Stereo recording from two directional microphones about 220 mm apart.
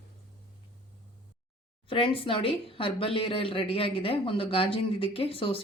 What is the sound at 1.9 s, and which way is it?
Speech, 25° left (ahead or behind).